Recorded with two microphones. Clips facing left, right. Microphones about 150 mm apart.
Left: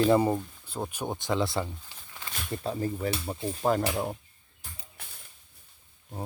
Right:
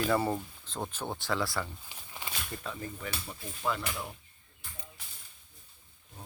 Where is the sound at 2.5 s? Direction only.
35° left (ahead or behind).